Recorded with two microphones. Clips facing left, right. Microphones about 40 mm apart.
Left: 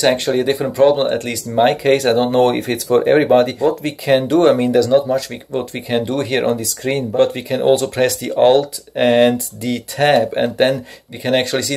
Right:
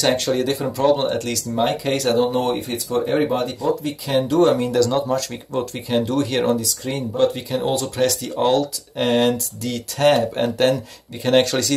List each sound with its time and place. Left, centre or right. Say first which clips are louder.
0.0 s speech: left 4 dB; centre
1.6 s speech: left 8 dB; left
2.2 s speech: left 6 dB; left
4.7 s speech: left 5 dB; centre; by 7.1 s left
7.2 s speech: left 2 dB; left
11.2 s speech: even; centre